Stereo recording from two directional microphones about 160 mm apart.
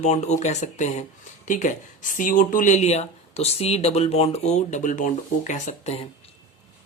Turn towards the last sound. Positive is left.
turn(degrees=40)  # may be behind; listen again after turning